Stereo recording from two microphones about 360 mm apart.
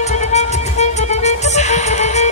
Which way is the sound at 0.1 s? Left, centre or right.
Centre.